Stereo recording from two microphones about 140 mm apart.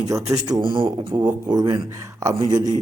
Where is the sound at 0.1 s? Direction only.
25° right (ahead or behind).